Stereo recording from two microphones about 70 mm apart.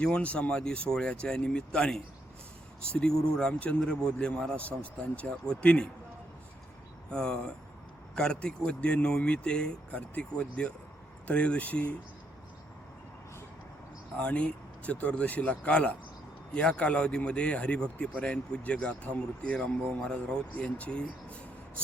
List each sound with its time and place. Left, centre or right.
0.0 s speech: centre
7.1 s speech: centre
14.2 s speech: centre